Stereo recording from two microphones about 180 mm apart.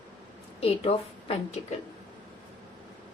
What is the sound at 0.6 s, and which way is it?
A woman's voice, 35° left (ahead or behind).